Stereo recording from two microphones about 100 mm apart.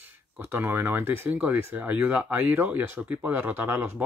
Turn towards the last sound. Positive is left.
turn(degrees=-20)  # may be behind; listen again after turning